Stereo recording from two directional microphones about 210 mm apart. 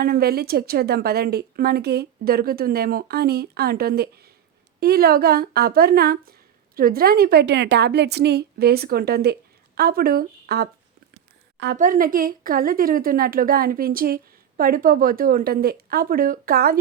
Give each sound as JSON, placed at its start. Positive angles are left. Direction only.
{"t": 0.0, "sound": "a woman's voice", "side_deg": -45}
{"t": 11.8, "sound": "a woman's voice", "side_deg": -40}